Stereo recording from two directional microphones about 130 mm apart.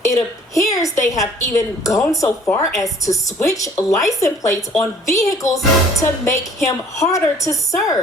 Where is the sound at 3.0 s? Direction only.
25° left (ahead or behind).